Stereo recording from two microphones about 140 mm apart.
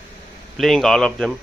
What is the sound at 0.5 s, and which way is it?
Speech, centre (ahead or behind).